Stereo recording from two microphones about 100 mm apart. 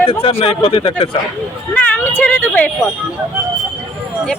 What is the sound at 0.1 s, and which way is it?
Speech, 70° left (ahead or behind).